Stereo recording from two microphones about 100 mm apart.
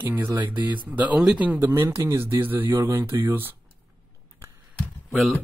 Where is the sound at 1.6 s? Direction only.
25° right (ahead or behind).